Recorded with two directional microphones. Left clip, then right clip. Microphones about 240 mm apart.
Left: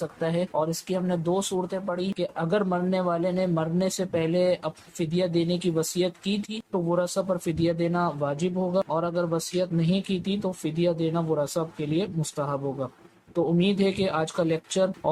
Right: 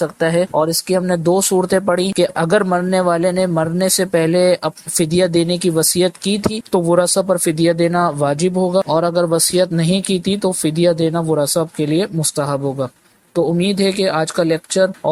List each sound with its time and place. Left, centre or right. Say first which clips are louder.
0.0 s speech: right 12 dB; right